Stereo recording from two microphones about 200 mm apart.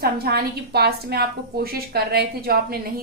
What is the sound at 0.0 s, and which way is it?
A woman's voice, 50° right (ahead or behind).